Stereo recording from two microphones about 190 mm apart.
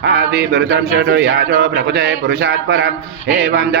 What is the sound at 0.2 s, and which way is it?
Mantra, 60° right (ahead or behind).